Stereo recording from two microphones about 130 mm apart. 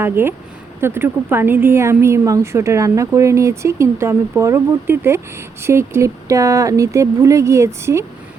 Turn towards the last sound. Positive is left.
turn(degrees=-20)  # may be behind; listen again after turning